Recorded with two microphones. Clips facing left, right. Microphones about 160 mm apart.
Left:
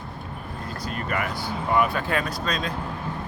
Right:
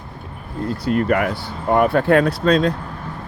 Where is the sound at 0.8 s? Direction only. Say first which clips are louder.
Right 11 dB; 65° right (ahead or behind).